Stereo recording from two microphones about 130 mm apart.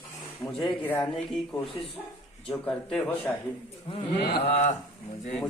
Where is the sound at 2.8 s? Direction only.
5° left (ahead or behind).